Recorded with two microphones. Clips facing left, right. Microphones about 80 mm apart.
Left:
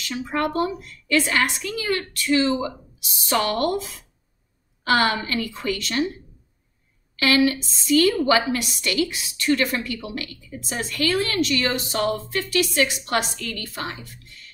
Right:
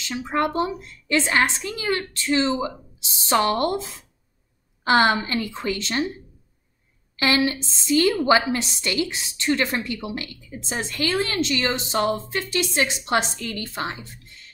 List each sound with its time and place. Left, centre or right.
0.0 s a woman's voice: right
7.2 s a woman's voice: right
14.0 s music: right